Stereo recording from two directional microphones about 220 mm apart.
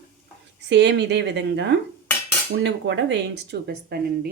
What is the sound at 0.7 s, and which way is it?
Speech, 50° right (ahead or behind).